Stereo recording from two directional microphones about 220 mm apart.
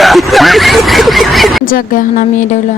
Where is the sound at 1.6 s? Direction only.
40° left (ahead or behind).